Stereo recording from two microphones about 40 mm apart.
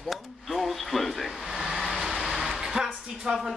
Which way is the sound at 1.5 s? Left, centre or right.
Centre.